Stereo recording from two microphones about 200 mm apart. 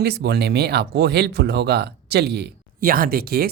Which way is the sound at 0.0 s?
55° right (ahead or behind).